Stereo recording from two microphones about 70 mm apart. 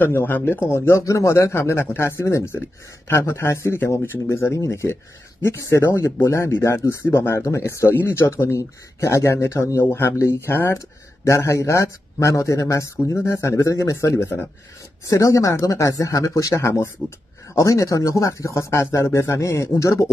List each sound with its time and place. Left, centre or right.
0.0 s speech: left